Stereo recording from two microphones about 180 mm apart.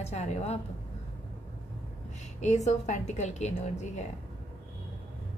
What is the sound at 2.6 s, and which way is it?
A woman's voice, 40° left (ahead or behind).